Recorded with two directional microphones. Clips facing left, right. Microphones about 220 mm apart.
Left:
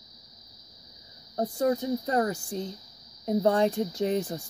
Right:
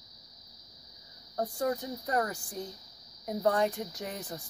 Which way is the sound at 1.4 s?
25° left (ahead or behind).